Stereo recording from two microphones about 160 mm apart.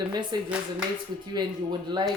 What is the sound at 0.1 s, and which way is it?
Speech, 25° right (ahead or behind).